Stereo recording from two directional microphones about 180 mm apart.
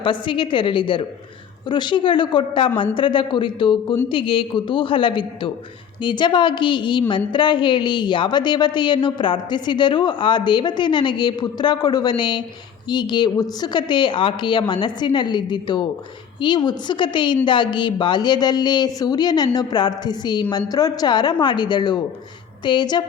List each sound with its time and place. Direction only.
0.0 s a woman's voice: 30° left (ahead or behind)